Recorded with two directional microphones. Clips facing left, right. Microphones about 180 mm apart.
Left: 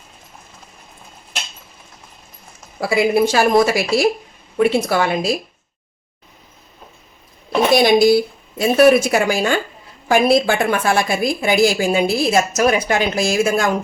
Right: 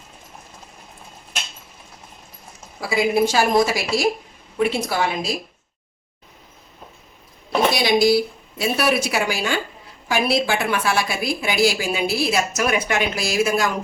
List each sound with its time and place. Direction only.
2.8 s a woman's voice: 60° left (ahead or behind)
7.7 s a woman's voice: 50° left (ahead or behind)